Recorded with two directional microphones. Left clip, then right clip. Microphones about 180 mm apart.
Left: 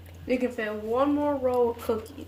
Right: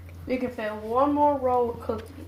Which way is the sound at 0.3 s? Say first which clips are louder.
Left 2 dB; 40° left (ahead or behind).